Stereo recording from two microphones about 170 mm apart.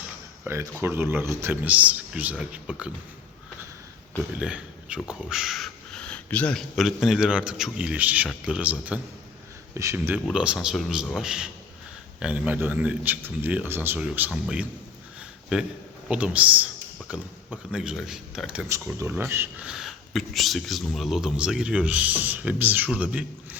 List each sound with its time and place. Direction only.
0.4 s speech: 15° right (ahead or behind)
4.4 s a man's voice: 5° right (ahead or behind)